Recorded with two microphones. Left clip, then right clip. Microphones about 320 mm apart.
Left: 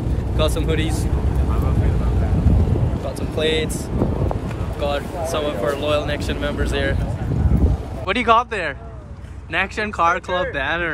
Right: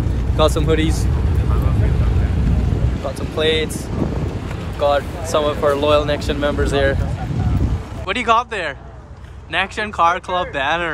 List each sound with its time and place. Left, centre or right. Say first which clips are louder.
0.4 s speech: right 5 dB; centre
3.3 s speech: right 3 dB; centre
4.7 s speech: right 6 dB; centre
8.1 s speech: even; centre